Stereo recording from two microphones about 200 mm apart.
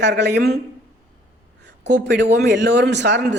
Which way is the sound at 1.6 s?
60° right (ahead or behind).